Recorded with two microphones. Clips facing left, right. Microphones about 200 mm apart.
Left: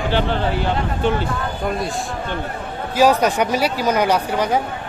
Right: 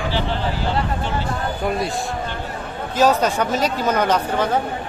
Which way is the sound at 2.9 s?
10° left (ahead or behind).